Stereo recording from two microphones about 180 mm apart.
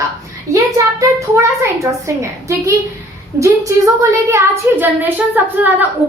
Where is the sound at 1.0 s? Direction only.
15° right (ahead or behind).